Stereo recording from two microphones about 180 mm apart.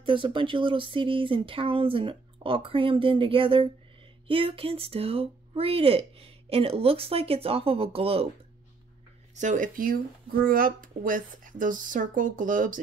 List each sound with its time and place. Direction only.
0.0 s speech: 25° right (ahead or behind)
9.3 s speech: 45° right (ahead or behind)